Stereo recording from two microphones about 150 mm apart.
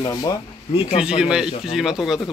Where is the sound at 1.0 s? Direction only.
5° right (ahead or behind).